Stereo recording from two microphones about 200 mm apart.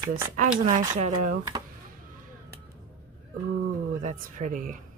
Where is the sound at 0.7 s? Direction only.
35° right (ahead or behind).